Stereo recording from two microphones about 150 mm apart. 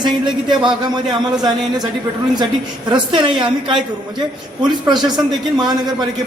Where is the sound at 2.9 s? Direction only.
35° right (ahead or behind).